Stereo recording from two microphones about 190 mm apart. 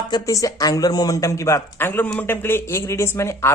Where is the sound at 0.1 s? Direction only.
20° left (ahead or behind).